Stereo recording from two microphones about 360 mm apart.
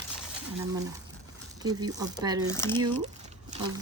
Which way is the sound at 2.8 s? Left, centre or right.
Centre.